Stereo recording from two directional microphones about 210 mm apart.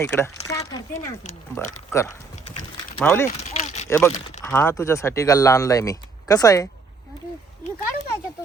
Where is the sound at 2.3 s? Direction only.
35° left (ahead or behind).